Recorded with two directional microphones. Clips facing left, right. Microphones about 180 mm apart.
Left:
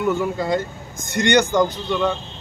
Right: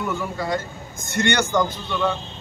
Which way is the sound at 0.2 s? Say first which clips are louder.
Left 4 dB; 20° left (ahead or behind).